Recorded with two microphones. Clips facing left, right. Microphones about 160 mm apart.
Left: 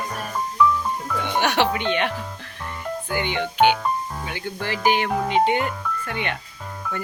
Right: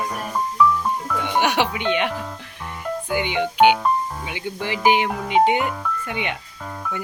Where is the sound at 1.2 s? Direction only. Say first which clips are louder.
Even; 10° right (ahead or behind).